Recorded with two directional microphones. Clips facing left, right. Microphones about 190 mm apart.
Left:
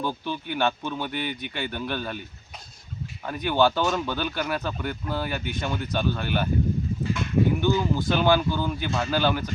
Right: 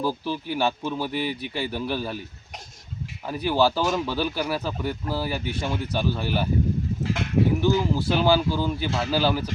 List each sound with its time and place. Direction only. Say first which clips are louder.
0.0 s speech: right 3 dB; 5° right (ahead or behind)
1.3 s speech: right 2 dB; 35° right (ahead or behind)
1.5 s speech: right 2 dB; 5° right (ahead or behind)
3.5 s speech: even; 5° right (ahead or behind)
7.0 s goat: right 1 dB; 75° right (ahead or behind)
7.6 s speech: right 1 dB; 5° right (ahead or behind)